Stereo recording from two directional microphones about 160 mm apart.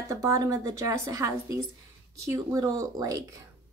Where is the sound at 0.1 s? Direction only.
20° right (ahead or behind).